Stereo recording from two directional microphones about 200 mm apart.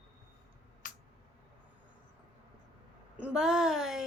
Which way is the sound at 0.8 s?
40° left (ahead or behind).